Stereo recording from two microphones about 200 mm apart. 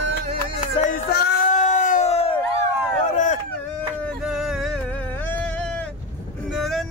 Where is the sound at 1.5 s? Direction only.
35° left (ahead or behind).